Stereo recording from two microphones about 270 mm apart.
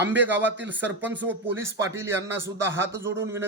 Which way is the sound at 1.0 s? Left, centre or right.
Centre.